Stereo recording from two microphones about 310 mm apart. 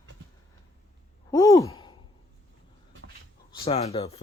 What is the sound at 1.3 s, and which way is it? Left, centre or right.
Sigh, centre.